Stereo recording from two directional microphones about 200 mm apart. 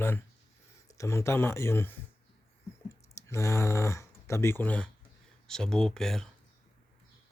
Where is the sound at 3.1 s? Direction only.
15° left (ahead or behind).